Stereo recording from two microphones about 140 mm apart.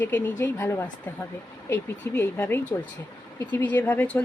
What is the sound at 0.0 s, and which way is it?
Speech, 15° left (ahead or behind).